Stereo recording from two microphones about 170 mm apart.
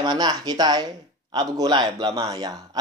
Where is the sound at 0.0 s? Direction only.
25° right (ahead or behind).